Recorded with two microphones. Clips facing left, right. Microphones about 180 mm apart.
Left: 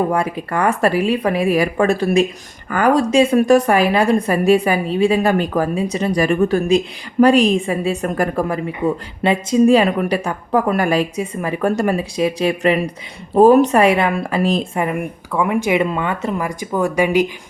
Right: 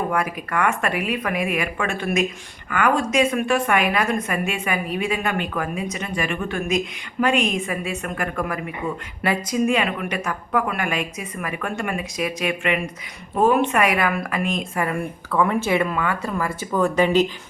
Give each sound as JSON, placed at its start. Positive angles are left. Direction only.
{"t": 0.1, "sound": "speech", "side_deg": 30}
{"t": 14.8, "sound": "speech", "side_deg": 20}